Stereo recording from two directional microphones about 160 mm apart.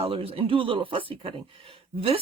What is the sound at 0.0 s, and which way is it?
Speech, 35° right (ahead or behind).